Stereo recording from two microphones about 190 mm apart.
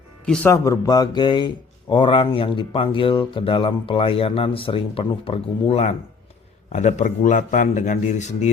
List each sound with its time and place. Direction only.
0.3 s speech: 15° left (ahead or behind); by 8.4 s 40° left (ahead or behind)